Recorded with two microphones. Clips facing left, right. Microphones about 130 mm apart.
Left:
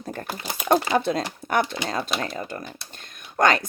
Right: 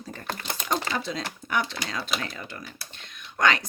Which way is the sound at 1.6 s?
20° left (ahead or behind).